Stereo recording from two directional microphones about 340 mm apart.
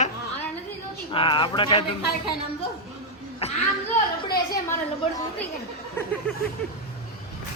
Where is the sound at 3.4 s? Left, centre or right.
Centre.